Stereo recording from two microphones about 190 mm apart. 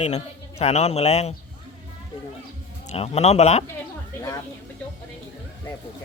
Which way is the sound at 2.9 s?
35° left (ahead or behind).